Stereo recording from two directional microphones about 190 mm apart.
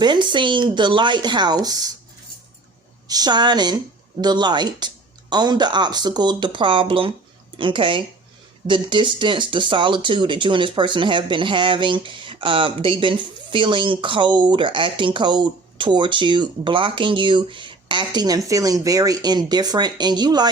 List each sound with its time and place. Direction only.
0.0 s speech: 25° right (ahead or behind)
3.1 s speech: 20° right (ahead or behind)